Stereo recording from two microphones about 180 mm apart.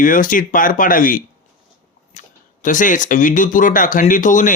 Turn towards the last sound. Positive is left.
turn(degrees=45)  # may be behind; listen again after turning